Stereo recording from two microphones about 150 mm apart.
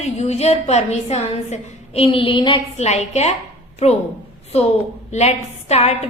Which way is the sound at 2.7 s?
45° left (ahead or behind).